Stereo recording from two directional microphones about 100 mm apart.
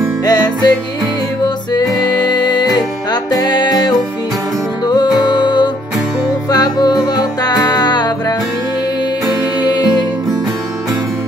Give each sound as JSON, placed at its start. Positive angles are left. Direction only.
{"t": 0.2, "sound": "music", "side_deg": 45}